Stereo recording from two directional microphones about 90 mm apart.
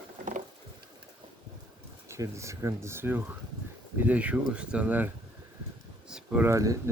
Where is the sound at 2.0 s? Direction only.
35° right (ahead or behind); by 5.1 s 15° right (ahead or behind).